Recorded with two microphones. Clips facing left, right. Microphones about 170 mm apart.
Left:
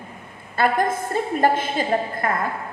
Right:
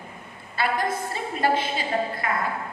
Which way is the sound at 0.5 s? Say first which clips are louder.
Left 5 dB; 50° left (ahead or behind).